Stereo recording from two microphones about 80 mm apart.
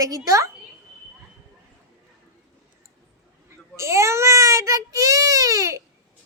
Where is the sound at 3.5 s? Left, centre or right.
Right.